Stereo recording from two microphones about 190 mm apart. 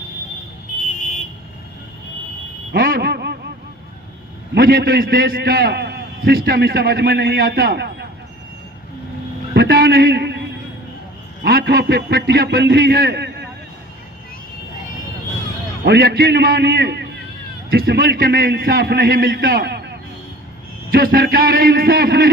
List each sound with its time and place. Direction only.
2.7 s a sound: 50° right (ahead or behind)
4.5 s a man's voice: 55° right (ahead or behind)
9.6 s a sound: 55° right (ahead or behind)
11.4 s a man's voice: 55° right (ahead or behind)
15.8 s a man's voice: 55° right (ahead or behind)
20.9 s a man's voice: 50° right (ahead or behind)